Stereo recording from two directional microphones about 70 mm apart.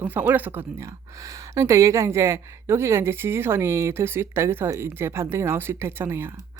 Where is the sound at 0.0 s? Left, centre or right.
Right.